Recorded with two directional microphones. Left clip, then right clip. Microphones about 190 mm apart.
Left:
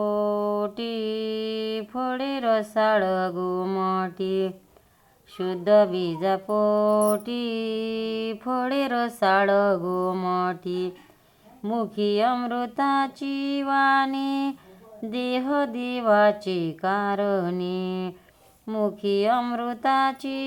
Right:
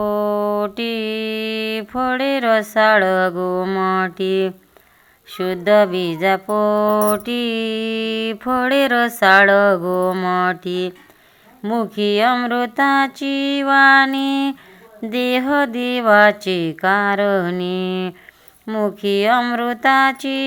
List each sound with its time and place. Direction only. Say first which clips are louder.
0.0 s music: right 6 dB; 20° right (ahead or behind)
0.8 s a sound: right 6 dB; 20° right (ahead or behind)
5.3 s music: right 5 dB; 20° right (ahead or behind)